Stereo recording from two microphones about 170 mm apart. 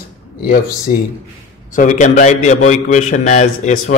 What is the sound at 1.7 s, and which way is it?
A man's voice, 50° left (ahead or behind).